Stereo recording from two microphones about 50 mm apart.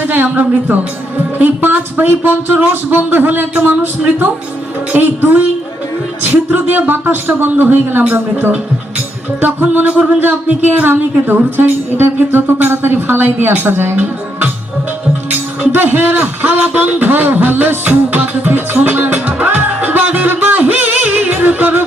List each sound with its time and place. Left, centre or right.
0.0 s speech: right
4.9 s speech: right
9.8 s speech: right
10.6 s speech: right